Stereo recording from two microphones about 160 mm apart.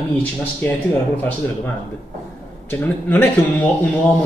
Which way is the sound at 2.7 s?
15° left (ahead or behind).